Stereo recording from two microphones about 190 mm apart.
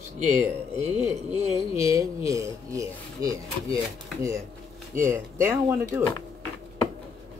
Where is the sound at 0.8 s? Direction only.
15° right (ahead or behind).